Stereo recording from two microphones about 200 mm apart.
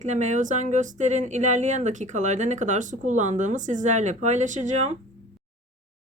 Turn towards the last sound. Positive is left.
turn(degrees=-35)  # may be behind; listen again after turning